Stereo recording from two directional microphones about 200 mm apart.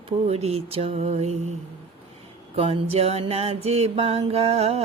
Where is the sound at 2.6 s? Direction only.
30° right (ahead or behind).